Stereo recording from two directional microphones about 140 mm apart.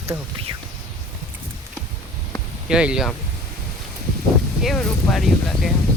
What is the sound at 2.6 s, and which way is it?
Speech, 5° right (ahead or behind).